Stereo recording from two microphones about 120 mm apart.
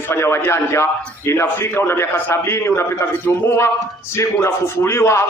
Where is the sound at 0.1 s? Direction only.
20° left (ahead or behind).